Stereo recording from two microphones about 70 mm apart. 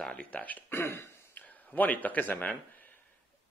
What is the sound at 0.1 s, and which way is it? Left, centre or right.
Speech, left.